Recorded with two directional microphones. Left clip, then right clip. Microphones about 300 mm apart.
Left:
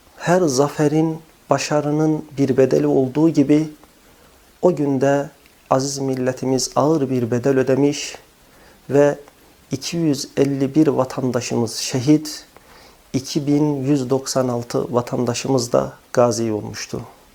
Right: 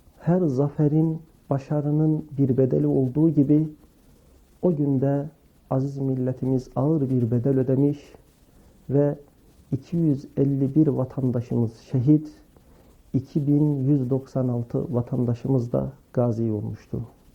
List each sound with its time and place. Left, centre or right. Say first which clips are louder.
0.2 s speech: left 8 dB; centre
11.3 s speech: left 7 dB; centre
13.6 s speech: left 5 dB; centre